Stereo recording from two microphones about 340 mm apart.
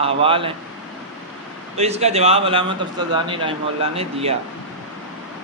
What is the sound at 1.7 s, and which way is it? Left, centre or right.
A man's voice, centre.